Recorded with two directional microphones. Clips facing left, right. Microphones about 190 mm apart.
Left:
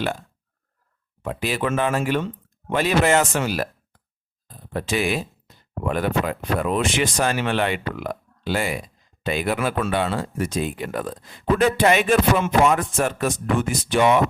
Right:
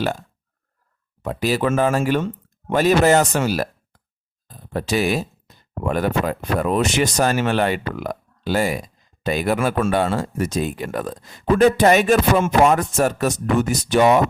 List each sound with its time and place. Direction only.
1.2 s speech: 40° right (ahead or behind)